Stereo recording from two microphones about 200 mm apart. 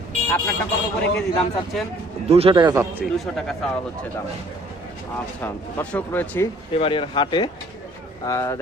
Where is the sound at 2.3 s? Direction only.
30° right (ahead or behind).